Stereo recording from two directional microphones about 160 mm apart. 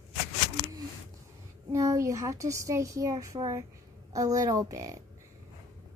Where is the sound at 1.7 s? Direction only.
20° right (ahead or behind).